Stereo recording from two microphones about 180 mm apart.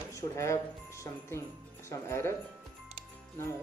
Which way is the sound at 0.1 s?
15° left (ahead or behind).